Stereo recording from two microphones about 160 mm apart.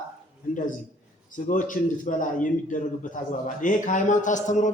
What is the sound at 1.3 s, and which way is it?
Speech, 55° left (ahead or behind).